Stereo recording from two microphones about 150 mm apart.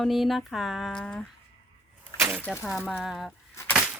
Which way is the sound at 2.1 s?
20° right (ahead or behind).